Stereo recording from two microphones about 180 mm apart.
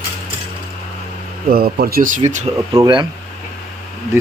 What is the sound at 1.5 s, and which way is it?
Speech, 55° right (ahead or behind).